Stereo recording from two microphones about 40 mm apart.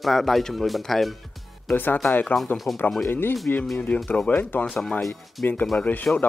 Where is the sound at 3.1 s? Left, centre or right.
Left.